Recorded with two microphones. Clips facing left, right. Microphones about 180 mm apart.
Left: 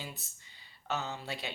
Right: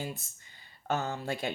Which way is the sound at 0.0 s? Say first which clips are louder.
Right 7 dB; 50° right (ahead or behind).